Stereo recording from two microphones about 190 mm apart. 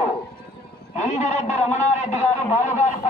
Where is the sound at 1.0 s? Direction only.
35° left (ahead or behind).